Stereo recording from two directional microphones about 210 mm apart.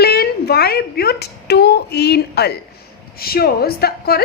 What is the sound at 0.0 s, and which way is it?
A child's voice, 50° left (ahead or behind).